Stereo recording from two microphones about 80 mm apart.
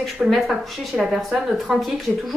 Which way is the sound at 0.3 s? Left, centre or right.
Centre.